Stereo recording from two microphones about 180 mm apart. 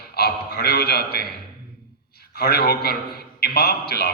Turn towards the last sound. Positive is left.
turn(degrees=60)  # may be behind; listen again after turning